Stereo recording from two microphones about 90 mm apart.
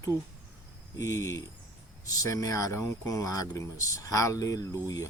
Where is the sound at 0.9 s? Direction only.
35° left (ahead or behind).